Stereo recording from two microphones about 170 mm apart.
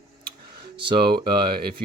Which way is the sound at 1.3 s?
65° right (ahead or behind).